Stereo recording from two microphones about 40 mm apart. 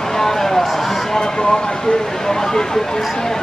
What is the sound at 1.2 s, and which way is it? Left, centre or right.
Speech, left.